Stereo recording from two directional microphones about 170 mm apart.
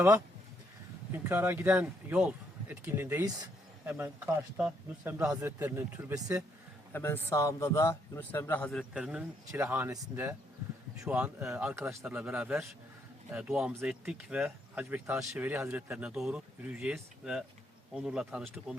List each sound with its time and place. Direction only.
1.1 s speech: 10° right (ahead or behind)
6.9 s a man's voice: 15° left (ahead or behind); by 11.7 s 5° right (ahead or behind)
11.7 s speech: 15° right (ahead or behind)